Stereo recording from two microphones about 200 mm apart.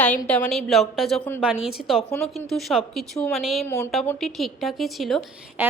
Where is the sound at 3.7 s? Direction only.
10° left (ahead or behind).